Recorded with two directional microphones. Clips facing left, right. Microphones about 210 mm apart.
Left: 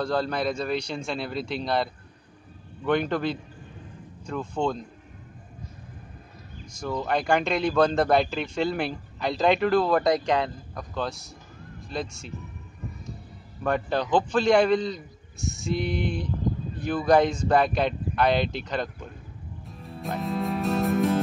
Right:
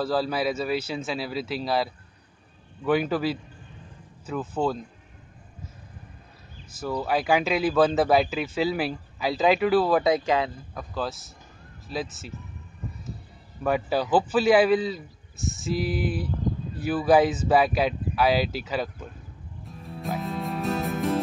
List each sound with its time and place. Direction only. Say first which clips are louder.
0.0 s speech: right 1 dB; 5° right (ahead or behind)
6.8 s speech: right 1 dB; 5° right (ahead or behind)
13.7 s speech: right 1 dB; 5° right (ahead or behind)
19.6 s music: right 1 dB; centre (ahead or behind)